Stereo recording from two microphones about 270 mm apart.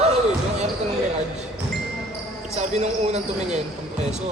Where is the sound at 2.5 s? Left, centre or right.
Right.